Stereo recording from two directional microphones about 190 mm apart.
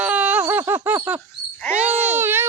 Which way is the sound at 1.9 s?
10° right (ahead or behind).